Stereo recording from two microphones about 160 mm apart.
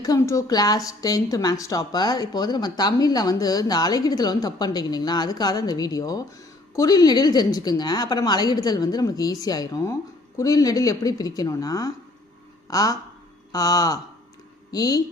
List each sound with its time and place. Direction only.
0.0 s a woman's voice: 20° left (ahead or behind)